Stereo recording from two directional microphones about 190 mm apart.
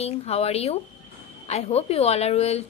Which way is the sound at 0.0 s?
35° left (ahead or behind).